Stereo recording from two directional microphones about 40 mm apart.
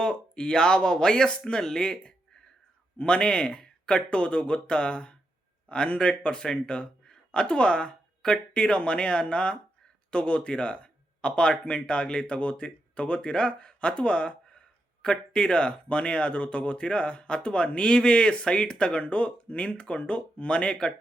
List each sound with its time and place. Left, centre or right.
0.0 s speech: left
3.0 s speech: left